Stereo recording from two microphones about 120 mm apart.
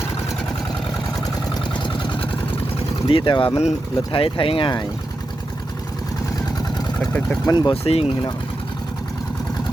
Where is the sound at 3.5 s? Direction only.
65° left (ahead or behind).